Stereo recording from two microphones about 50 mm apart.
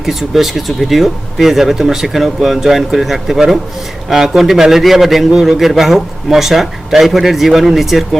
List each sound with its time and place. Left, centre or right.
0.0 s speech: centre